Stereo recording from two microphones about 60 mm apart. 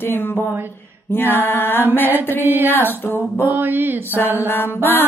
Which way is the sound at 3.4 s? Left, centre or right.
Right.